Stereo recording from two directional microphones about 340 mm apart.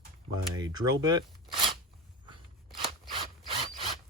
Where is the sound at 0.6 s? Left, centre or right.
Centre.